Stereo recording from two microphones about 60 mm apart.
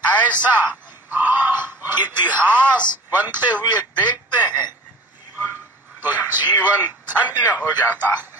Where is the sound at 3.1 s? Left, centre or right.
Right.